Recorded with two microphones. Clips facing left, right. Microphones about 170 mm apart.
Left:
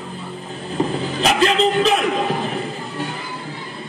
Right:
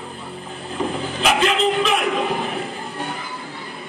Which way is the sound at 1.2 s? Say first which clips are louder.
Left 2 dB; 35° left (ahead or behind).